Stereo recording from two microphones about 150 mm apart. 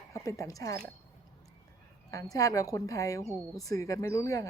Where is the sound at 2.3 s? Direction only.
25° left (ahead or behind).